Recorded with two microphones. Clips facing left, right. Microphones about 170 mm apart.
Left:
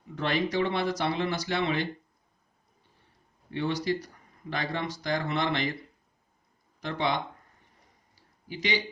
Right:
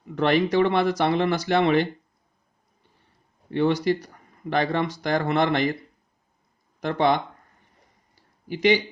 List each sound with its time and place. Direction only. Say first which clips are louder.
0.2 s speech: right 8 dB; 60° right (ahead or behind)
3.5 s speech: right 7 dB; 65° right (ahead or behind)
6.7 s speech: right 8 dB; 55° right (ahead or behind)